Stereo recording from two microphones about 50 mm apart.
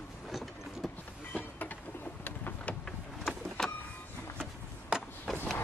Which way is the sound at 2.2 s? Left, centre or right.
Left.